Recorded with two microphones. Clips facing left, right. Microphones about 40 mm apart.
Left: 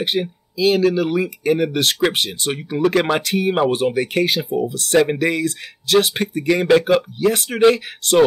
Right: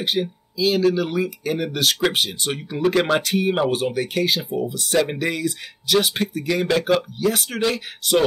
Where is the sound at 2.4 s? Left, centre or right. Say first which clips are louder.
Left 3 dB; centre.